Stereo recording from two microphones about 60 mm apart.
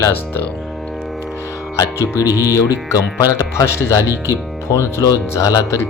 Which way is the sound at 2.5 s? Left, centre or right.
Left.